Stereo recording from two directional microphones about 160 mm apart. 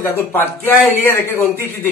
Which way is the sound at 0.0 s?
15° left (ahead or behind).